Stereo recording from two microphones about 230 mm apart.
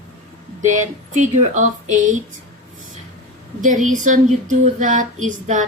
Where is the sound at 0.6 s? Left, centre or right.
Right.